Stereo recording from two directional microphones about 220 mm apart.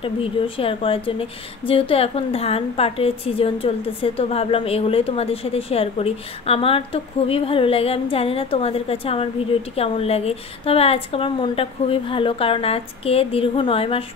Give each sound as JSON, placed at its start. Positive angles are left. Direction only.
{"t": 0.0, "sound": "a woman's voice", "side_deg": 25}